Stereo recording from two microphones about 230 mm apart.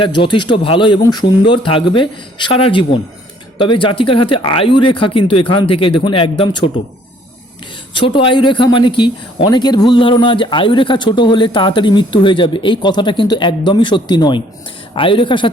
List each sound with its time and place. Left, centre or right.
0.0 s speech: left
7.9 s speech: left